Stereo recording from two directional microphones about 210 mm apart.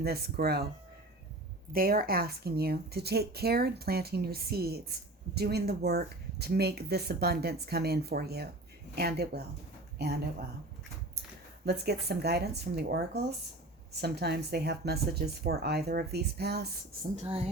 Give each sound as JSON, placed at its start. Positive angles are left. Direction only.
{"t": 0.0, "sound": "speech", "side_deg": -50}
{"t": 1.7, "sound": "speech", "side_deg": -45}
{"t": 11.6, "sound": "speech", "side_deg": -50}
{"t": 17.2, "sound": "a woman's voice", "side_deg": -25}